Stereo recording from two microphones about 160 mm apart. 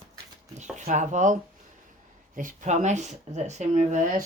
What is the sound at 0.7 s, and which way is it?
Speech, 50° right (ahead or behind).